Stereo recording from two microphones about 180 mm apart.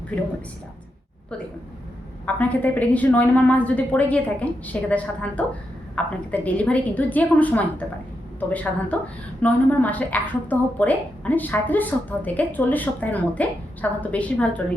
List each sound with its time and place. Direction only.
2.2 s a woman's voice: 10° left (ahead or behind)